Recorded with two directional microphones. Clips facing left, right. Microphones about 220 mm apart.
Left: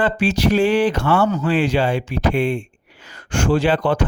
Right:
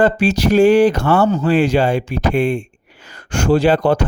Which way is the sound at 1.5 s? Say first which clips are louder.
Right 4 dB; 45° right (ahead or behind).